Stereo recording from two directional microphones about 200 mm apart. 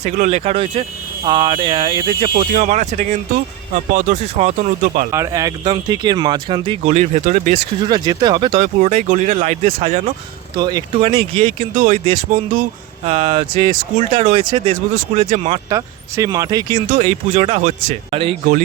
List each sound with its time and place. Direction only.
0.0 s speech: 35° right (ahead or behind)
2.3 s speech: 45° right (ahead or behind)
5.1 s speech: 15° right (ahead or behind)
6.9 s speech: 35° right (ahead or behind)
8.6 s speech: 35° right (ahead or behind)
10.5 s speech: 20° right (ahead or behind)
15.7 s speech: 15° right (ahead or behind)
16.9 s speech: 35° right (ahead or behind)